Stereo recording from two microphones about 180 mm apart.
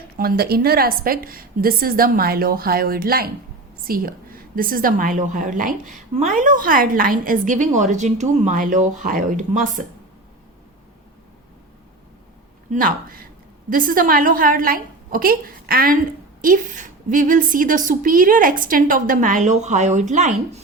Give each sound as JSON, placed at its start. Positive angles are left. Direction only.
{"t": 0.2, "sound": "a woman's voice", "side_deg": -55}
{"t": 12.7, "sound": "a woman's voice", "side_deg": -50}